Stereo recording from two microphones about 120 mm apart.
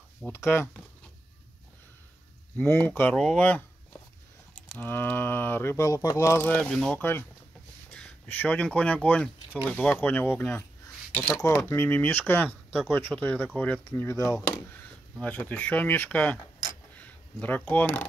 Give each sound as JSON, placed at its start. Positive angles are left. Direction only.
{"t": 0.2, "sound": "speech", "side_deg": 20}
{"t": 2.5, "sound": "speech", "side_deg": 10}
{"t": 6.7, "sound": "speech", "side_deg": 5}
{"t": 7.0, "sound": "speech", "side_deg": 20}
{"t": 14.7, "sound": "speech", "side_deg": 15}
{"t": 16.5, "sound": "a sound", "side_deg": 10}